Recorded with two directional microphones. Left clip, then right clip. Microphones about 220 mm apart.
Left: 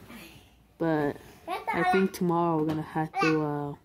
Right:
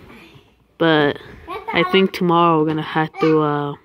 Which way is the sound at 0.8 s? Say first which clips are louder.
Right 12 dB; centre (ahead or behind).